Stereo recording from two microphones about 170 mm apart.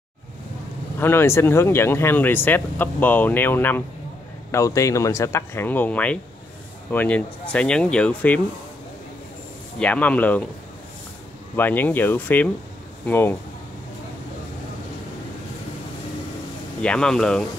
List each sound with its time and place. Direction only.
0.9 s speech: 15° left (ahead or behind)
9.8 s speech: 10° left (ahead or behind)
11.5 s speech: 10° left (ahead or behind)
16.8 s speech: 5° left (ahead or behind)